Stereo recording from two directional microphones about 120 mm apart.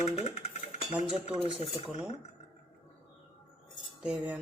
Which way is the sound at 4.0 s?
10° right (ahead or behind).